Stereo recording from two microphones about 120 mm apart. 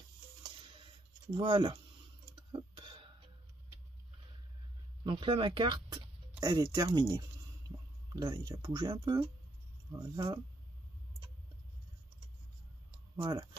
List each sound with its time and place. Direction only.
0.4 s a sound: 45° right (ahead or behind)
2.5 s throat clearing: 45° right (ahead or behind)
5.0 s speech: 40° right (ahead or behind)
13.1 s speech: 35° right (ahead or behind)